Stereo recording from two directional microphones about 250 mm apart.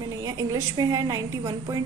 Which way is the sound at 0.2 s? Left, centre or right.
Centre.